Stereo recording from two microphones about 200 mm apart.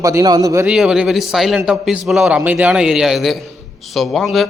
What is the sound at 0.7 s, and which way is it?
A man's voice, 5° right (ahead or behind).